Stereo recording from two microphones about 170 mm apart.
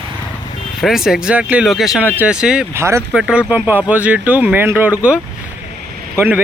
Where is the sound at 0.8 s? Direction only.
Centre (ahead or behind).